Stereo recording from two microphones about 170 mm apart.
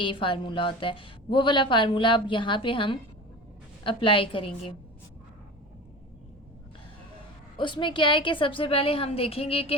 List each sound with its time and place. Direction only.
0.0 s a woman's voice: 30° left (ahead or behind)
7.5 s a woman's voice: 30° left (ahead or behind)